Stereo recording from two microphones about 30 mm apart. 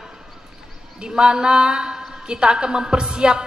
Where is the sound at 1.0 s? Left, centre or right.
Right.